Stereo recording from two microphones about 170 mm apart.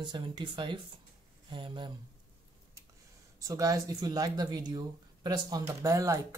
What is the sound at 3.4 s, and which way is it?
Speech, 20° right (ahead or behind).